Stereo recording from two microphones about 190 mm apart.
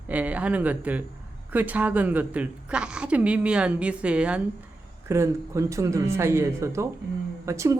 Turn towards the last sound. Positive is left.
turn(degrees=-15)  # may be behind; listen again after turning